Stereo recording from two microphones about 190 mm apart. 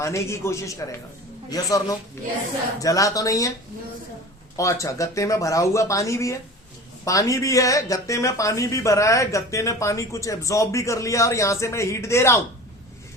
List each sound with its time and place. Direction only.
0.0 s a man's voice: 15° left (ahead or behind)
4.5 s speech: 15° left (ahead or behind)